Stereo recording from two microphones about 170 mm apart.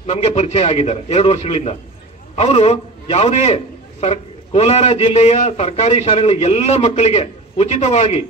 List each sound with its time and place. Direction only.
0.0 s a man's voice: 35° left (ahead or behind)